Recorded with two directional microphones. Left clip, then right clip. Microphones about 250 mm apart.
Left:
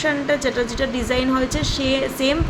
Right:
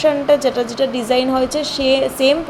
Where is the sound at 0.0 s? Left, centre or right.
Centre.